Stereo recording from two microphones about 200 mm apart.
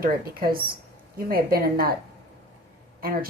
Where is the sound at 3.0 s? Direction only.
45° right (ahead or behind).